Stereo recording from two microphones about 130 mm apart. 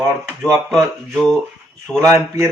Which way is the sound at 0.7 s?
Centre (ahead or behind).